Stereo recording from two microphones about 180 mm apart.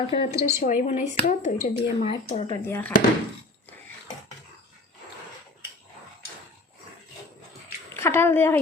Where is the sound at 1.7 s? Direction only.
30° left (ahead or behind).